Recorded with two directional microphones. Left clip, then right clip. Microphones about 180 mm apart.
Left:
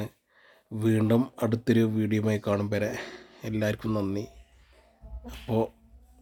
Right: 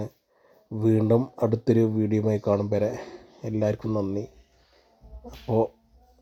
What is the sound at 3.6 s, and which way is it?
Speech, centre (ahead or behind).